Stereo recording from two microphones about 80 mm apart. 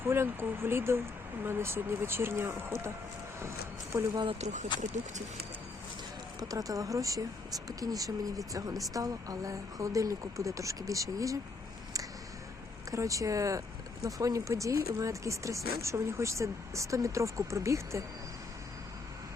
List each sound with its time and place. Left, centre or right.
0.0 s speech: right
3.9 s speech: right
6.5 s speech: right
12.9 s speech: right